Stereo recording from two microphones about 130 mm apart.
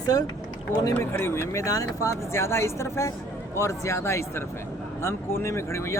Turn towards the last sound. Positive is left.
turn(degrees=20)  # may be behind; listen again after turning